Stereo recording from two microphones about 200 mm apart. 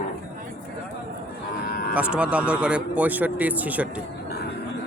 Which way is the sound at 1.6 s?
50° left (ahead or behind).